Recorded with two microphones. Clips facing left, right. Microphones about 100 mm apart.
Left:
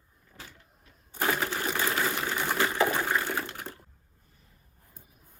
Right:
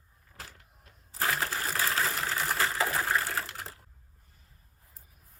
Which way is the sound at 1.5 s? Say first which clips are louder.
Left 2 dB; centre (ahead or behind).